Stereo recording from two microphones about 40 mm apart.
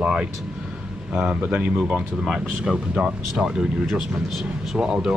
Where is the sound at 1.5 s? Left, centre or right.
Right.